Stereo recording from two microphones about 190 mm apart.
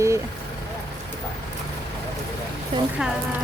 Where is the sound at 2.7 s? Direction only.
25° right (ahead or behind).